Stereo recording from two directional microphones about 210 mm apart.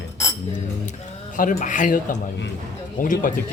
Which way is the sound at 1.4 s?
40° left (ahead or behind).